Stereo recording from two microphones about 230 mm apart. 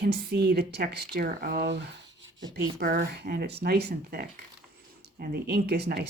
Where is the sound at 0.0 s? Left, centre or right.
Right.